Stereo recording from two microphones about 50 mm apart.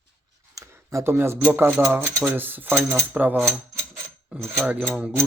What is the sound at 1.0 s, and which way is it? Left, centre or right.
Speech, right.